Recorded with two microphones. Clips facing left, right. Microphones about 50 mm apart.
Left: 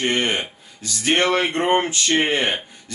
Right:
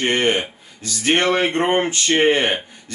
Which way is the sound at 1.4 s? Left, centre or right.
Right.